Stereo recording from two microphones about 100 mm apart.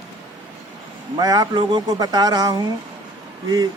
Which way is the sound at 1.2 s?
40° right (ahead or behind).